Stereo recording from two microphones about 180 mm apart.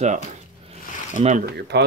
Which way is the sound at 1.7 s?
70° right (ahead or behind).